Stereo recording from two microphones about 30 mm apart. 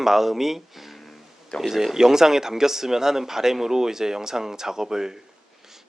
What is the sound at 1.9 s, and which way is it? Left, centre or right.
Speech, centre.